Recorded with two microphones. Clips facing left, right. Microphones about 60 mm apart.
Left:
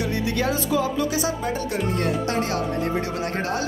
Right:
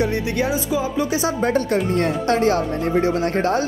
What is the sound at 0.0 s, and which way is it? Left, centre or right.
Speech, right.